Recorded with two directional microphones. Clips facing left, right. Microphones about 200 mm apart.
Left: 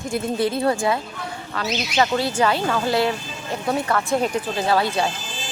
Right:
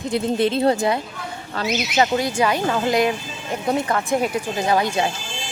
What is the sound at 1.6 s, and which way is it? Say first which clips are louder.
Speech: right 2 dB; 10° right (ahead or behind).